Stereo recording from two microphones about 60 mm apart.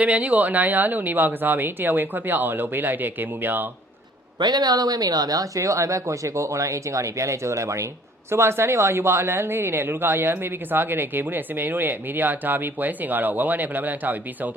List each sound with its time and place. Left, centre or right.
0.0 s speech: right
4.4 s speech: right
8.3 s speech: right